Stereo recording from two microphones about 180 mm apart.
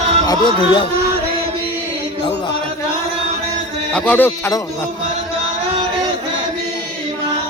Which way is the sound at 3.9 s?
10° left (ahead or behind).